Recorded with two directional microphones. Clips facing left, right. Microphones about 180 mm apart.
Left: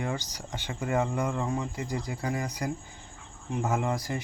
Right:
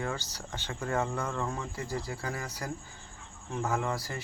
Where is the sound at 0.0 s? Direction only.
15° left (ahead or behind).